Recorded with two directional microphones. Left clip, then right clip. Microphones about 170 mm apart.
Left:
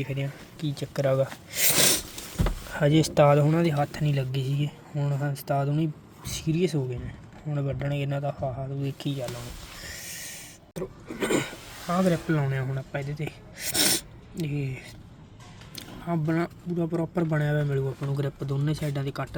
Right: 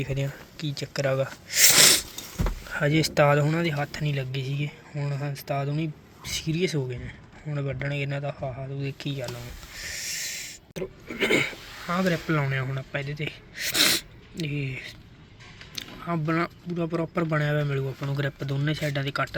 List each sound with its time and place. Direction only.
0.0 s speech: centre (ahead or behind)
0.5 s speech: 20° left (ahead or behind)
9.7 s a sound: 15° left (ahead or behind)
15.7 s speech: 15° left (ahead or behind)
18.0 s speech: 5° left (ahead or behind)